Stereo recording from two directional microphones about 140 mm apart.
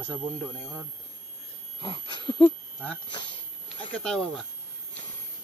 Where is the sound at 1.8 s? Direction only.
35° left (ahead or behind).